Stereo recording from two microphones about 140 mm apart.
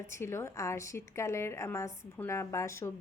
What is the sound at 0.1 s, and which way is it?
A woman's voice, 20° left (ahead or behind).